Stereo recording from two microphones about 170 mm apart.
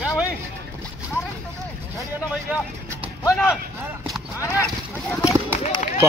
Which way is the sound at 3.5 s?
Centre (ahead or behind).